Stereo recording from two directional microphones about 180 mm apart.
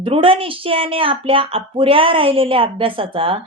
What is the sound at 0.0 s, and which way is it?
Speech, 30° right (ahead or behind).